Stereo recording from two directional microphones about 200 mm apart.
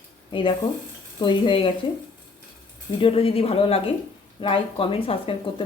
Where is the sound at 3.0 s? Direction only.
30° left (ahead or behind).